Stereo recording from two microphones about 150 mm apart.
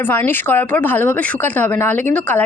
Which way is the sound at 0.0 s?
15° left (ahead or behind).